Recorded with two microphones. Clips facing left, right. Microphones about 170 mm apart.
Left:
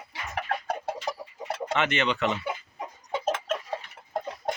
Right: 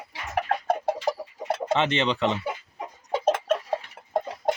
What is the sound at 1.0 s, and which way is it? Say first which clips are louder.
Chicken: right 6 dB; 30° right (ahead or behind).